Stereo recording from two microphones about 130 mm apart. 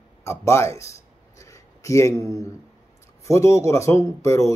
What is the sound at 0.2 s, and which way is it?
Speech, 20° left (ahead or behind).